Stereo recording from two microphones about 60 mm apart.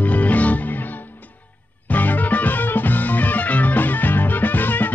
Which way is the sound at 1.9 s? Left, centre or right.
Left.